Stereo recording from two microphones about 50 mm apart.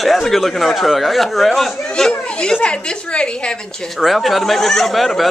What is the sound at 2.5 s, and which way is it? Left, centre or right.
A woman's voice, left.